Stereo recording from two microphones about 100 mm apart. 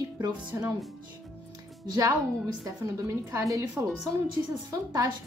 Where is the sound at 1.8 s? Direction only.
40° right (ahead or behind).